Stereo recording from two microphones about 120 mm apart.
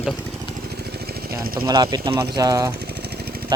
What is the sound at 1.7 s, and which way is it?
Speech, 35° right (ahead or behind).